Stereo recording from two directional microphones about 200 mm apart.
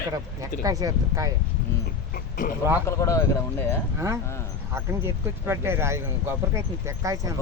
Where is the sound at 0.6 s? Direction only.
15° right (ahead or behind).